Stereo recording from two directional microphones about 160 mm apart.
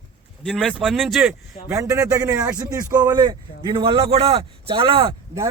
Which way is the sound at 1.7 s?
20° right (ahead or behind).